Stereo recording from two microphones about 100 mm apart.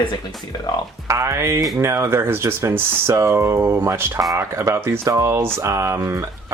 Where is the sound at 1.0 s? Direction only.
30° right (ahead or behind).